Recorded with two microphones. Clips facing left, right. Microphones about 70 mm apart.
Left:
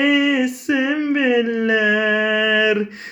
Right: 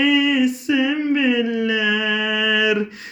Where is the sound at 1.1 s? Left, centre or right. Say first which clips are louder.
Left 1 dB; left.